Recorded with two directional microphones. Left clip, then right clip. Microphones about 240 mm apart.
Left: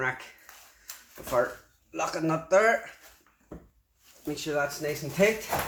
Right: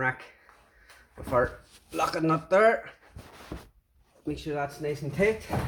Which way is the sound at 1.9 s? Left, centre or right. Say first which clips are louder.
Right 3 dB; right.